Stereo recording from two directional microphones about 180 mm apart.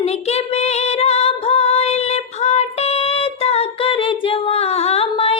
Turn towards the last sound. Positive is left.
turn(degrees=30)  # may be behind; listen again after turning